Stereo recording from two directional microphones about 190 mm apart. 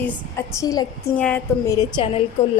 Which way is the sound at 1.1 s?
5° left (ahead or behind).